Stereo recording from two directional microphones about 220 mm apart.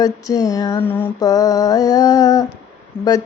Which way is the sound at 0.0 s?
15° left (ahead or behind).